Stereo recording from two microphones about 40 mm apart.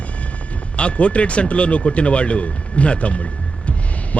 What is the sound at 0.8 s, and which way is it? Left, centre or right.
Speech, left.